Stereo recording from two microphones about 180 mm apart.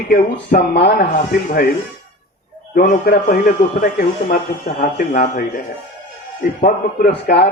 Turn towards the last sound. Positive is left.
turn(degrees=65)  # may be behind; listen again after turning